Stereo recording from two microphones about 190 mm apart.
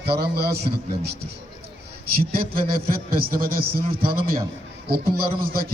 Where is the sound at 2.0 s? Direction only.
50° right (ahead or behind).